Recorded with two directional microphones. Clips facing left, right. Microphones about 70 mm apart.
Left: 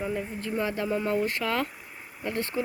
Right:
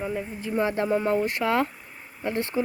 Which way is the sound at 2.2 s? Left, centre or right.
Right.